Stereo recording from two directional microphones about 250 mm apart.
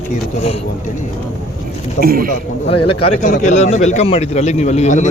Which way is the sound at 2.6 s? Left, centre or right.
Left.